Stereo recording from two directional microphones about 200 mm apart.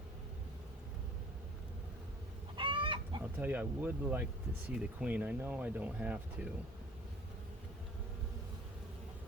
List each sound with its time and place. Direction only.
2.6 s chicken: 25° right (ahead or behind)
3.3 s speech: 10° right (ahead or behind)